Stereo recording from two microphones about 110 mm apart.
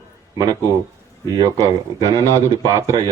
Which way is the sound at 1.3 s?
35° right (ahead or behind).